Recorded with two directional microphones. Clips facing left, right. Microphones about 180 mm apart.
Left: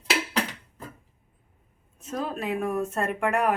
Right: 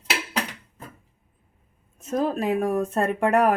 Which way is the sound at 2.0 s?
45° right (ahead or behind).